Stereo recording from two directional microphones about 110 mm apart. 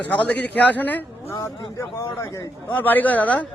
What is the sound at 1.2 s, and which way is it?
A man's voice, 25° left (ahead or behind).